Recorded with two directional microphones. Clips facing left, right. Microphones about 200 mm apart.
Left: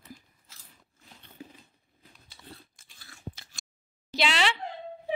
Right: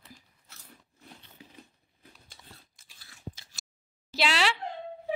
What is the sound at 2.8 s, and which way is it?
Crunch, 50° left (ahead or behind).